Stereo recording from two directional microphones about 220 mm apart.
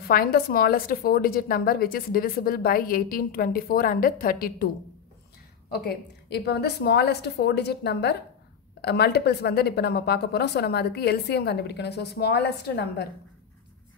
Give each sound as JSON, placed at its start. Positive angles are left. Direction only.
{"t": 0.1, "sound": "a woman's voice", "side_deg": 40}
{"t": 5.7, "sound": "speech", "side_deg": 45}